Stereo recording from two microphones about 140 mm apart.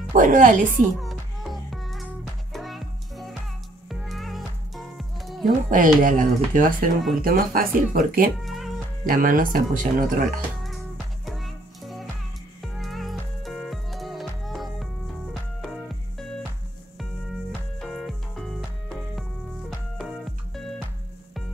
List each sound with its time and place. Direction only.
0.1 s speech: 70° right (ahead or behind)
0.9 s music: centre (ahead or behind)
5.7 s speech: 70° right (ahead or behind)
7.2 s speech: 90° right
8.5 s music: centre (ahead or behind)
9.0 s speech: 80° right
11.2 s music: centre (ahead or behind)
17.7 s music: centre (ahead or behind)